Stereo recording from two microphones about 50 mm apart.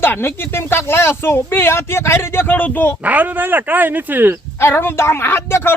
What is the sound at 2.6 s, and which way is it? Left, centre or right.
Speech, left.